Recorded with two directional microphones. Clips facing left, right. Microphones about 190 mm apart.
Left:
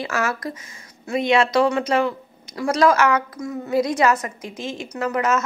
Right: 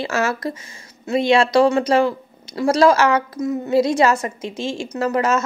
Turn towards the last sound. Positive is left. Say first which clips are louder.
# right 3 dB
turn(degrees=-30)  # may be behind; listen again after turning